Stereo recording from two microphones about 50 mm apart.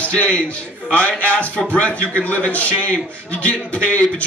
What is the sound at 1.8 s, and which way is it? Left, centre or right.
A man's voice, left.